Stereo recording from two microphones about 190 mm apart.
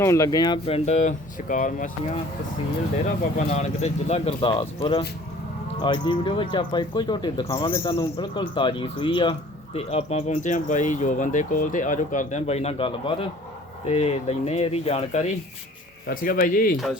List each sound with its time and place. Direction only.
0.0 s speech: 15° left (ahead or behind); by 1.9 s 45° left (ahead or behind)
3.3 s speech: 35° left (ahead or behind)
16.0 s speech: 50° left (ahead or behind)